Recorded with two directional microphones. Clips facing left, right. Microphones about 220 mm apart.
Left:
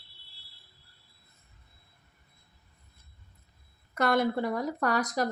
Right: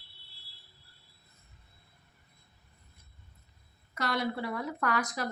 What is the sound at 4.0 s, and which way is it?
A woman's voice, 50° left (ahead or behind).